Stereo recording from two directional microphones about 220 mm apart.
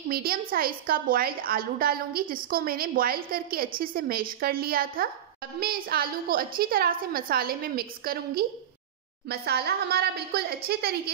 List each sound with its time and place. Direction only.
0.1 s a woman's voice: 40° right (ahead or behind)